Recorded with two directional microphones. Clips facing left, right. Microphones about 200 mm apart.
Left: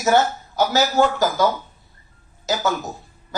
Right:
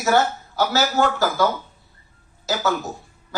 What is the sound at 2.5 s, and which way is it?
Speech, 20° left (ahead or behind).